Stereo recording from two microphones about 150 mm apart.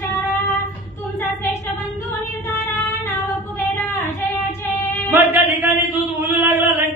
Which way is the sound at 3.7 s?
10° left (ahead or behind).